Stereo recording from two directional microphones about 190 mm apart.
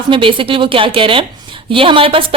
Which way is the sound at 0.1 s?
25° right (ahead or behind).